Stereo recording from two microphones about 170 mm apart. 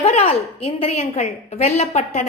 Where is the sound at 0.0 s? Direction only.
35° left (ahead or behind).